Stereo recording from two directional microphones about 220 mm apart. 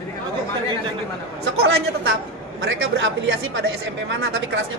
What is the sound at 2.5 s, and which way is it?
A man's voice, 60° right (ahead or behind).